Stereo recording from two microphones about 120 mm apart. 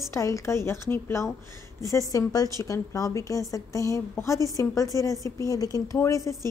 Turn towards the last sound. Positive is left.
turn(degrees=25)  # may be behind; listen again after turning